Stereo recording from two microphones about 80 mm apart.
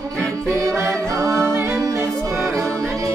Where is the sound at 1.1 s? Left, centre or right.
Right.